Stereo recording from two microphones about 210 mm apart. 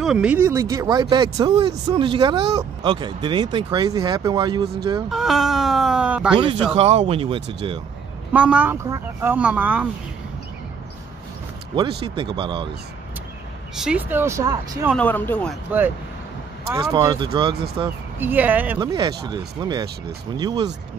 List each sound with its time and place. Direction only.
0.0 s speech: 5° right (ahead or behind); by 4.6 s 20° right (ahead or behind)
5.1 s cat: centre (ahead or behind)
6.3 s speech: 25° right (ahead or behind)
8.3 s speech: 5° right (ahead or behind)
12.0 s speech: 25° right (ahead or behind)
13.7 s speech: 5° right (ahead or behind)
15.0 s speech: 10° left (ahead or behind)
16.7 s speech: 15° right (ahead or behind)
18.2 s speech: 10° right (ahead or behind)
18.8 s speech: 20° right (ahead or behind)